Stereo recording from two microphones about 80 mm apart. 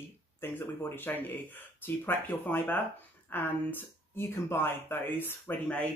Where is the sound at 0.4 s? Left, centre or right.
Left.